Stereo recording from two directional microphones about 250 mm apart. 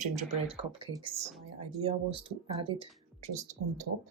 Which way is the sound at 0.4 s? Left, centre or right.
Right.